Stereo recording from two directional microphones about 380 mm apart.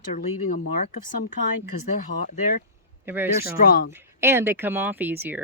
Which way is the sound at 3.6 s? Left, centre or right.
Left.